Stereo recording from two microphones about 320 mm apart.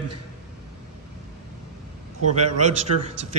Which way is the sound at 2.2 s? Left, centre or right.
Right.